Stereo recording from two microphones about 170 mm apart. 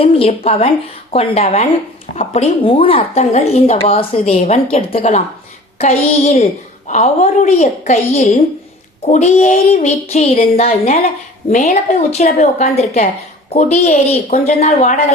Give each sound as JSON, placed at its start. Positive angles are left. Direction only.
{"t": 0.0, "sound": "a woman's voice", "side_deg": 35}